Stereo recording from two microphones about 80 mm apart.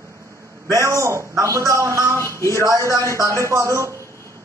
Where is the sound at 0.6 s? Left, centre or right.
Right.